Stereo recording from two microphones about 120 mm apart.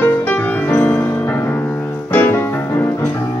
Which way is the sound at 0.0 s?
15° left (ahead or behind).